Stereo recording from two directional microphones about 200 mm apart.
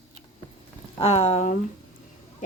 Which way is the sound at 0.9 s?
30° left (ahead or behind).